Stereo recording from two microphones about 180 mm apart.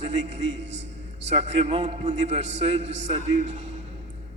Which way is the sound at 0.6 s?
85° right.